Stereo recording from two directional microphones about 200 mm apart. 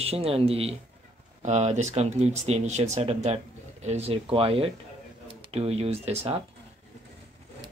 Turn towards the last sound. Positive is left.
turn(degrees=-30)  # may be behind; listen again after turning